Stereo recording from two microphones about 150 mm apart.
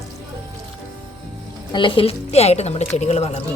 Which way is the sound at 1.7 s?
35° left (ahead or behind).